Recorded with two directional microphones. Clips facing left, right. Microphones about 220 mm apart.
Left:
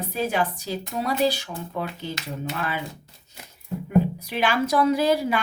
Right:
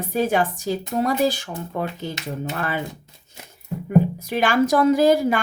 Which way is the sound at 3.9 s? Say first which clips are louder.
Right 3 dB; 45° right (ahead or behind).